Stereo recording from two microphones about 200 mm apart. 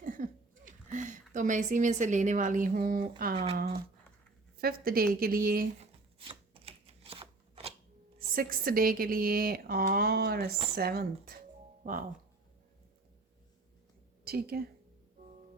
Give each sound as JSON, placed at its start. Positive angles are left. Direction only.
{"t": 0.0, "sound": "speech", "side_deg": -40}
{"t": 3.3, "sound": "a sound", "side_deg": -30}
{"t": 4.5, "sound": "speech", "side_deg": -50}
{"t": 5.8, "sound": "chopping", "side_deg": -30}
{"t": 8.3, "sound": "speech", "side_deg": -45}
{"t": 14.3, "sound": "speech", "side_deg": -50}